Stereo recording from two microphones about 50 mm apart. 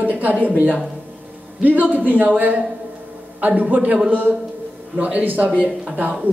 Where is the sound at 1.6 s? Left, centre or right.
Right.